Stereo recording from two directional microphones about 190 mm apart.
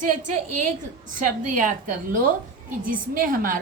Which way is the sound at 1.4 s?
40° right (ahead or behind).